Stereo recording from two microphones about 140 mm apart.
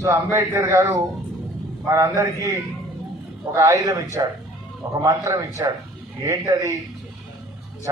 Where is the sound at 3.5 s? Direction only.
25° right (ahead or behind).